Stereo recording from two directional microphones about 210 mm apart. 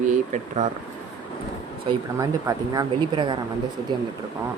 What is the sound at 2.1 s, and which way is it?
Speech, 15° right (ahead or behind).